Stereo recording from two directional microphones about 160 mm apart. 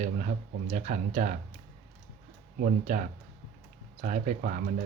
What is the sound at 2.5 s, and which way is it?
Speech, 60° right (ahead or behind).